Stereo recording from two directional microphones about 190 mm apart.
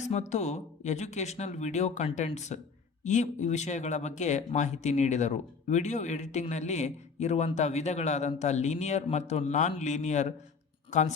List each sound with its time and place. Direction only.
0.0 s speech: 40° left (ahead or behind)